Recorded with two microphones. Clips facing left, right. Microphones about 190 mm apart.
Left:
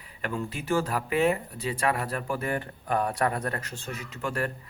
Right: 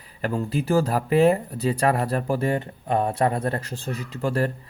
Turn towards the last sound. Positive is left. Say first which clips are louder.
# right 6 dB
turn(degrees=-35)  # may be behind; listen again after turning